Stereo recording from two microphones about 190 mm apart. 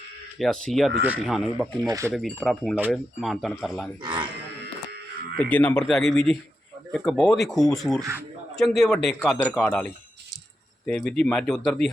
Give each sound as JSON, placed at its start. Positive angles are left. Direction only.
{"t": 0.3, "sound": "speech", "side_deg": 0}
{"t": 1.9, "sound": "speech", "side_deg": -15}
{"t": 2.1, "sound": "speech", "side_deg": 0}
{"t": 4.0, "sound": "speech", "side_deg": -25}
{"t": 5.4, "sound": "speech", "side_deg": 5}